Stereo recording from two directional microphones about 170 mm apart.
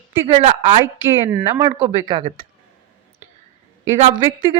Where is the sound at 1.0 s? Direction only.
10° right (ahead or behind).